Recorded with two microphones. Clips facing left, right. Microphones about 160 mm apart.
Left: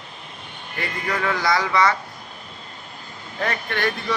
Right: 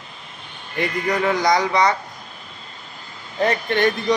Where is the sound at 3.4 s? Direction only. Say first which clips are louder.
Right 6 dB; 20° right (ahead or behind).